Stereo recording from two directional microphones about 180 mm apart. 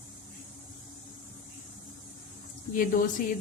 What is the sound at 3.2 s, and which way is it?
Speech, 50° left (ahead or behind).